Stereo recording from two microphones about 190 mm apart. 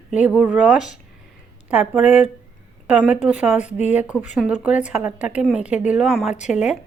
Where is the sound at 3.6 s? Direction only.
35° left (ahead or behind).